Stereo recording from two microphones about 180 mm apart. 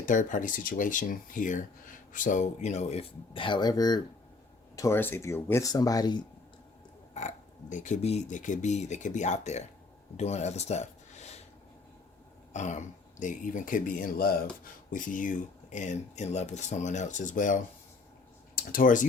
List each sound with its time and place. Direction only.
0.0 s speech: 45° left (ahead or behind); by 6.2 s 25° left (ahead or behind)
7.1 s speech: 40° left (ahead or behind)
12.5 s speech: 40° left (ahead or behind)